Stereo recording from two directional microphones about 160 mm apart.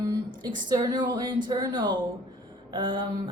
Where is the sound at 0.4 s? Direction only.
30° right (ahead or behind).